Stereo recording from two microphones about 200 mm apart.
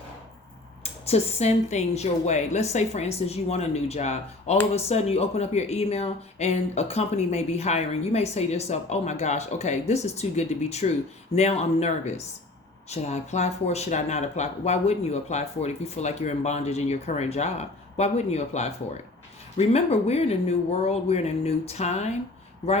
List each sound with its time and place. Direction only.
1.0 s speech: 30° left (ahead or behind)